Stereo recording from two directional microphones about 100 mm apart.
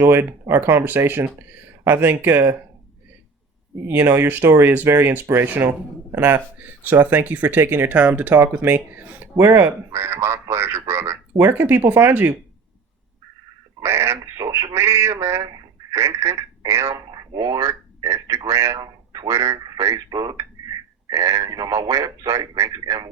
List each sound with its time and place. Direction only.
0.0 s speech: 20° right (ahead or behind)
3.8 s speech: 25° right (ahead or behind)
13.8 s speech: 25° right (ahead or behind)
14.3 s speech: 40° right (ahead or behind)
14.8 s speech: 25° right (ahead or behind)
16.0 s speech: 25° right (ahead or behind)